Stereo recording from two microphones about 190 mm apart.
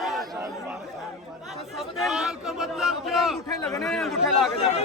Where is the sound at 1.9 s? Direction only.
Centre (ahead or behind).